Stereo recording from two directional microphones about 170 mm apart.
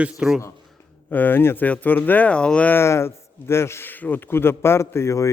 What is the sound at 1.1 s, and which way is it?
Speech, 10° left (ahead or behind).